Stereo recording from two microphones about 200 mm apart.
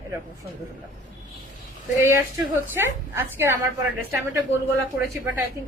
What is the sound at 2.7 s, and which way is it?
Speech, 10° right (ahead or behind).